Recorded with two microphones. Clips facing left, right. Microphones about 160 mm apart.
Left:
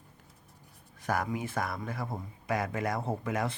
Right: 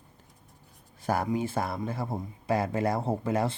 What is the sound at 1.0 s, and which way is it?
Speech, 30° right (ahead or behind).